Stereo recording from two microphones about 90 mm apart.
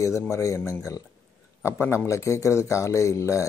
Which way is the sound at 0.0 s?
35° left (ahead or behind).